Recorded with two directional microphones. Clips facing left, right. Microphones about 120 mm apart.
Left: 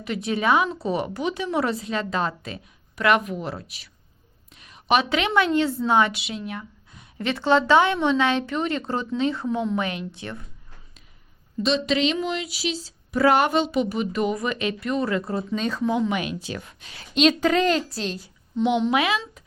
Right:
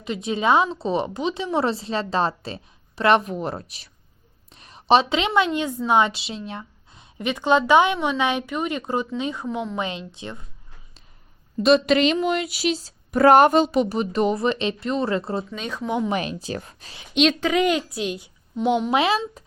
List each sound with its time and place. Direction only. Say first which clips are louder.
0.0 s a woman's voice: right 1 dB; 20° right (ahead or behind)
11.6 s speech: right 5 dB; 55° right (ahead or behind); by 15.4 s 25° right (ahead or behind)
15.4 s speech: left 5 dB; 5° right (ahead or behind)
16.0 s speech: right 1 dB; 35° right (ahead or behind)
17.0 s speech: left 1 dB; centre (ahead or behind)
17.6 s speech: right 1 dB; 10° right (ahead or behind)
18.9 s a woman's voice: right 2 dB; 30° right (ahead or behind)